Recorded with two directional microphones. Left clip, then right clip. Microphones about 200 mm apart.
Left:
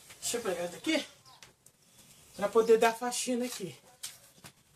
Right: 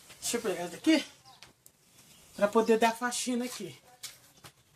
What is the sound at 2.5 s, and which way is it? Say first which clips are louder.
Speech: left 3 dB; 35° right (ahead or behind).